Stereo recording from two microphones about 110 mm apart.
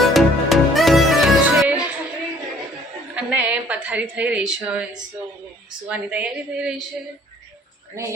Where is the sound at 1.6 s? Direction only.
10° right (ahead or behind).